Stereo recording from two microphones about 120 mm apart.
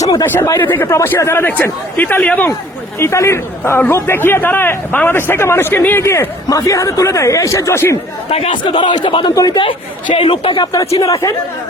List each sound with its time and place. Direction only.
0.0 s a sound: 30° left (ahead or behind)
0.4 s a man's voice: 20° left (ahead or behind)
3.0 s a man's voice: 25° left (ahead or behind)
8.3 s a man's voice: 55° left (ahead or behind)
8.6 s a man's voice: 40° left (ahead or behind)
9.3 s a man's voice: 30° left (ahead or behind)
10.2 s a man's voice: 50° left (ahead or behind); by 11.3 s 25° left (ahead or behind)